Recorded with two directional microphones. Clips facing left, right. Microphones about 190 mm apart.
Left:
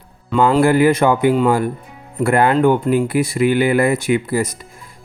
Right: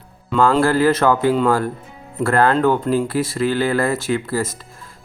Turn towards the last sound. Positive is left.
turn(degrees=15)  # may be behind; listen again after turning